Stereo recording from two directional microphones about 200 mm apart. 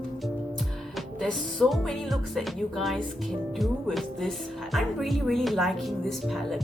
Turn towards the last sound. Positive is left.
turn(degrees=0)  # may be behind; listen again after turning